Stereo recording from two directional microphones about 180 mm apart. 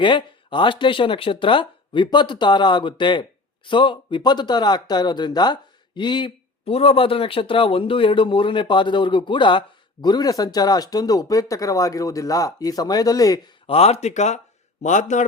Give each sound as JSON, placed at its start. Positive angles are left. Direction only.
{"t": 0.0, "sound": "speech", "side_deg": 25}
{"t": 13.7, "sound": "speech", "side_deg": 35}